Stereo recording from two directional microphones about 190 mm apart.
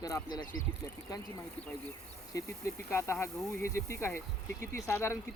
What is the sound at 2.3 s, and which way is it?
Speech, 15° left (ahead or behind).